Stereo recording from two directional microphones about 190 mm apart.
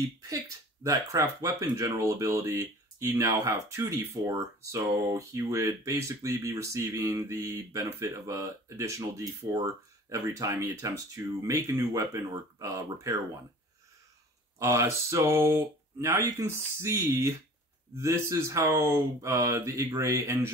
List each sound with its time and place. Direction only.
0.3 s speech: 15° right (ahead or behind)
14.6 s speech: 15° right (ahead or behind)